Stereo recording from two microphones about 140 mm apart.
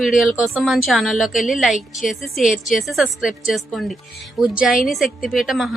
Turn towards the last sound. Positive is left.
turn(degrees=0)  # may be behind; listen again after turning